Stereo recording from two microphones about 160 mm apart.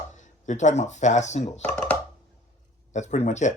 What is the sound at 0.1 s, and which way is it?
Speech, 50° left (ahead or behind).